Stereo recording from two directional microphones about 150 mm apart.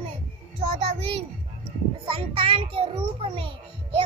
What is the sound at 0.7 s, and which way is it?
Child singing, 40° right (ahead or behind).